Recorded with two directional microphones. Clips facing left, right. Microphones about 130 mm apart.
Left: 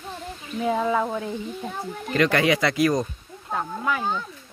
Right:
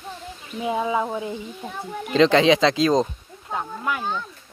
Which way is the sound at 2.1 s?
20° right (ahead or behind).